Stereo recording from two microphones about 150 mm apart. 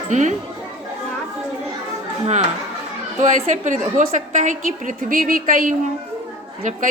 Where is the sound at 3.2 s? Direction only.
55° right (ahead or behind).